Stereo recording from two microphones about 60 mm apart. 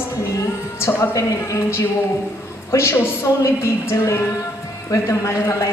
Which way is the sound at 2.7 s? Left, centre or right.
Left.